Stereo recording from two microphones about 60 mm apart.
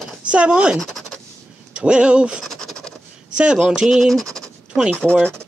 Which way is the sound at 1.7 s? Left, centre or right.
Centre.